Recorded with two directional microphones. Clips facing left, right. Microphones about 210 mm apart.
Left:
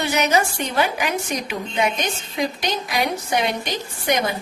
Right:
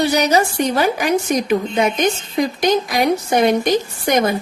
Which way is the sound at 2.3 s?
45° right (ahead or behind).